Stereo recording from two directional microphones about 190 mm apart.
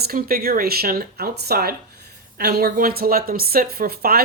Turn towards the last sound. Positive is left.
turn(degrees=-55)  # may be behind; listen again after turning